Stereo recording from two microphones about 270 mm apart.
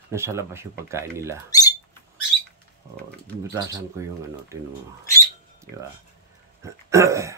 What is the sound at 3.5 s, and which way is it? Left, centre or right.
Speech, centre.